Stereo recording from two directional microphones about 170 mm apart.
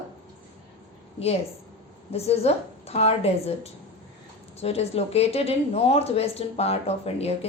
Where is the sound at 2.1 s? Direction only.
35° left (ahead or behind).